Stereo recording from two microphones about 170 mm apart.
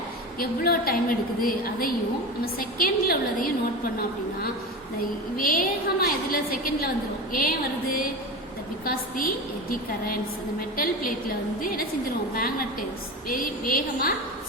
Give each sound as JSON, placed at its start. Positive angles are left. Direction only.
{"t": 0.3, "sound": "a woman's voice", "side_deg": 60}
{"t": 5.4, "sound": "a woman's voice", "side_deg": 55}
{"t": 12.3, "sound": "a woman's voice", "side_deg": 60}